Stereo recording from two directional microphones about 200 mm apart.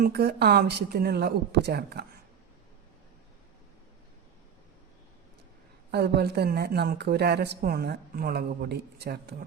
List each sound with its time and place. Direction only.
0.0 s a woman's voice: 50° right (ahead or behind)
5.9 s a woman's voice: 55° right (ahead or behind)